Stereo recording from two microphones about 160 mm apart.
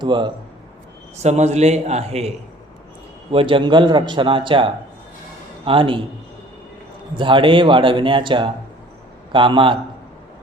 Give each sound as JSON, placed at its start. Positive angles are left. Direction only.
{"t": 0.0, "sound": "speech", "side_deg": -30}
{"t": 1.1, "sound": "a man's voice", "side_deg": -45}
{"t": 3.3, "sound": "speech", "side_deg": -30}
{"t": 7.2, "sound": "speech", "side_deg": -30}